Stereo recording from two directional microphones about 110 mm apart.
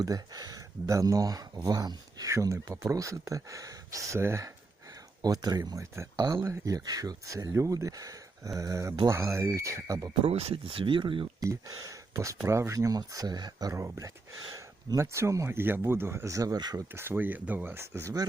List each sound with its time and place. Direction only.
0.0 s speech: 35° right (ahead or behind)
10.2 s speech: 60° right (ahead or behind)
11.3 s speech: 35° right (ahead or behind)
16.9 s speech: 20° right (ahead or behind)